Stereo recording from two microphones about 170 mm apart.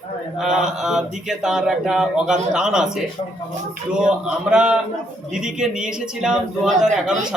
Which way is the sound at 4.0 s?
5° right (ahead or behind).